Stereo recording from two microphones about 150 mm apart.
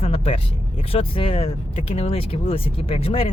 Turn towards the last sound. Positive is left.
turn(degrees=40)  # may be behind; listen again after turning